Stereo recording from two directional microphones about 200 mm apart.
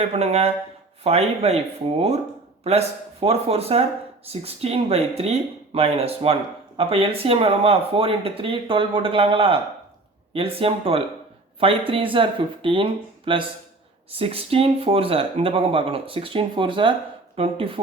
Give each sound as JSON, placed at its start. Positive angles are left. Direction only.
{"t": 0.0, "sound": "speech", "side_deg": -35}